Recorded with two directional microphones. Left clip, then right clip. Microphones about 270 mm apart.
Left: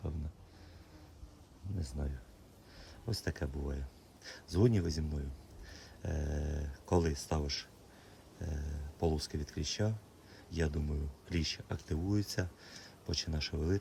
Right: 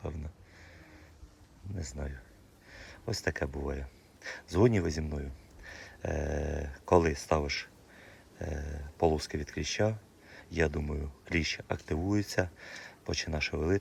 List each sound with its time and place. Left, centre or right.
1.8 s speech: centre